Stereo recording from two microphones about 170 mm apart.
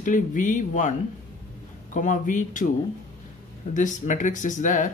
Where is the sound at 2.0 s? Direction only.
50° left (ahead or behind).